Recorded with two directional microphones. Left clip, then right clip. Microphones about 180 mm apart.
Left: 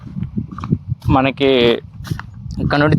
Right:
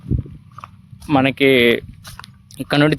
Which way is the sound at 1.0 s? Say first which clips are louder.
Even; 15° right (ahead or behind).